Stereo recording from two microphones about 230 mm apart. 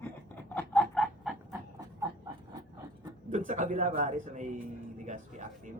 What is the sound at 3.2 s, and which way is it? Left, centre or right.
A man's voice, right.